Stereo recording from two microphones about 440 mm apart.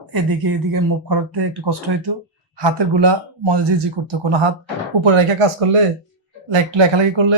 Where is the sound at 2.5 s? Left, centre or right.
Right.